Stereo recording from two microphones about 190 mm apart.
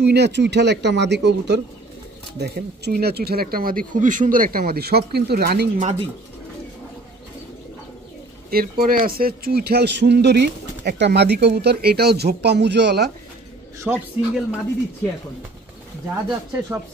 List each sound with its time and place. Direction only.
0.0 s a man's voice: 60° right (ahead or behind)
8.5 s a man's voice: 50° right (ahead or behind)
13.8 s a man's voice: 5° right (ahead or behind)